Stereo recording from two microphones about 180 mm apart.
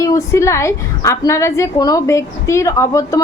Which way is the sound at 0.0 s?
15° left (ahead or behind).